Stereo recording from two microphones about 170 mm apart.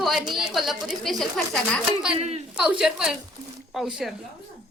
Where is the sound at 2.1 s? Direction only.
35° right (ahead or behind).